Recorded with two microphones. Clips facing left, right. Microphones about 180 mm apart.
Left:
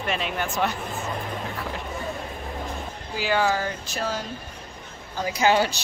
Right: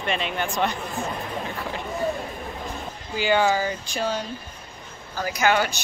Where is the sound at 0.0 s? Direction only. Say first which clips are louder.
Right 1 dB; 5° left (ahead or behind).